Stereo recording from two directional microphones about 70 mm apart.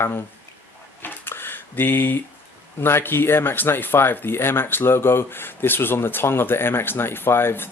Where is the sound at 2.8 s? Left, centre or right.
Left.